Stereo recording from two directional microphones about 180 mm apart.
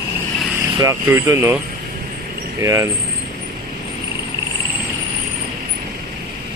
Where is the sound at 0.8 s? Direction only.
15° right (ahead or behind).